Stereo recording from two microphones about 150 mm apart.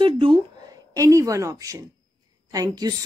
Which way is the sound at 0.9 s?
20° right (ahead or behind).